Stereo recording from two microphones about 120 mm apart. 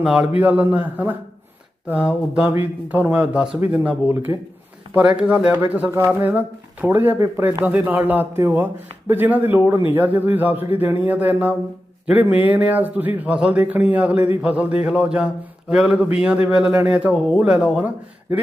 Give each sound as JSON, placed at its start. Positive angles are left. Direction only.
{"t": 0.0, "sound": "a man's voice", "side_deg": -10}